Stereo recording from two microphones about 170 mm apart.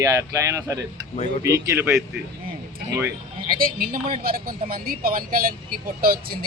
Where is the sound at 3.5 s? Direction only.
60° right (ahead or behind).